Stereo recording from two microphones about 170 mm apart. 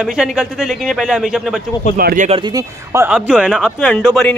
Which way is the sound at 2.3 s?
25° right (ahead or behind).